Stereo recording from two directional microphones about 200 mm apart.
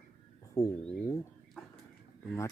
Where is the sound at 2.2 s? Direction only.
15° left (ahead or behind).